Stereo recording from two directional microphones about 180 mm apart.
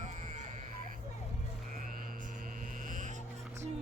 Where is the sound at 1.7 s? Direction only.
50° right (ahead or behind).